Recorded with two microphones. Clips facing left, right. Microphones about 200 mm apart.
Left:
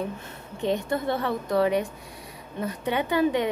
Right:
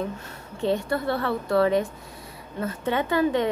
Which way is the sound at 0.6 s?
20° left (ahead or behind).